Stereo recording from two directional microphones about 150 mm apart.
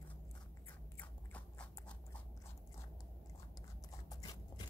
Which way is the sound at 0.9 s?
10° left (ahead or behind).